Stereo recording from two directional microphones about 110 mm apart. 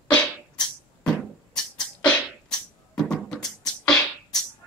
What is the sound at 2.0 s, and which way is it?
Beatboxing, 10° left (ahead or behind).